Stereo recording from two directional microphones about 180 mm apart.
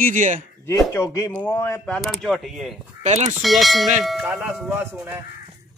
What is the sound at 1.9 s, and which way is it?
Speech, centre (ahead or behind).